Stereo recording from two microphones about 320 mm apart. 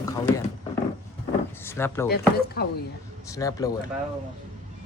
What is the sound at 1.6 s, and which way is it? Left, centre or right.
Speech, centre.